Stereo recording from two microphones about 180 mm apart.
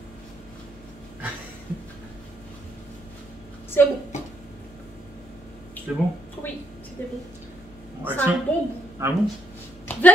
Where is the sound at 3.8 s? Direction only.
10° left (ahead or behind).